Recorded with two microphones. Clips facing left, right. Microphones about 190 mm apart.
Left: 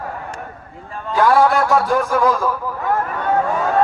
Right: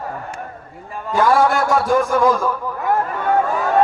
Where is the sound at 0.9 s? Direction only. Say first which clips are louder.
Left 1 dB; 5° right (ahead or behind).